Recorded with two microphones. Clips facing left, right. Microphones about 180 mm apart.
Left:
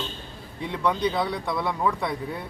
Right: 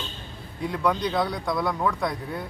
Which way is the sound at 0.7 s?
Centre (ahead or behind).